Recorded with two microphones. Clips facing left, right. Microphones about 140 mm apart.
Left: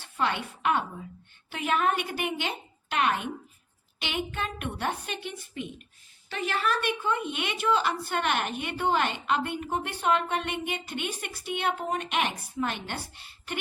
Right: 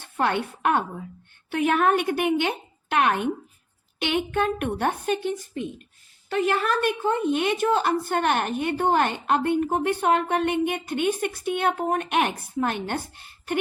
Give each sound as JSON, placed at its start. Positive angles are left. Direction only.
{"t": 0.0, "sound": "a woman's voice", "side_deg": -50}